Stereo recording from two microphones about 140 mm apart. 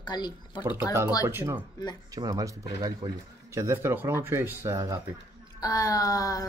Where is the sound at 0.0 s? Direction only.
30° left (ahead or behind).